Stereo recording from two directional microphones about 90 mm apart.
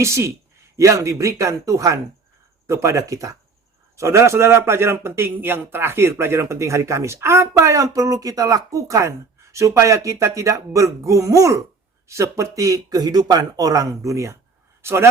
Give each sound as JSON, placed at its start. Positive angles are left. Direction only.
{"t": 0.0, "sound": "a man's voice", "side_deg": -30}